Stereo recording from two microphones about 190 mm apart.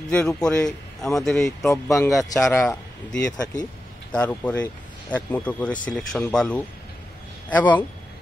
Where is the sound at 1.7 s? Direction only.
15° left (ahead or behind).